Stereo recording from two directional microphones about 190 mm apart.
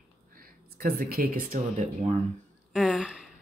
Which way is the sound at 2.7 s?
5° right (ahead or behind).